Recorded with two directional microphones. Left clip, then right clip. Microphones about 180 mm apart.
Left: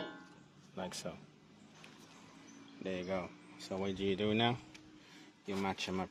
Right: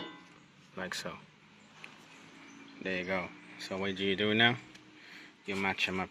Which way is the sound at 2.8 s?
Centre (ahead or behind).